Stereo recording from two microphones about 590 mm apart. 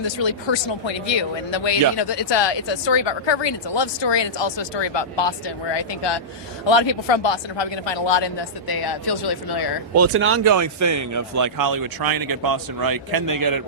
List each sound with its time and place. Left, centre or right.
0.0 s speech: left
9.9 s speech: right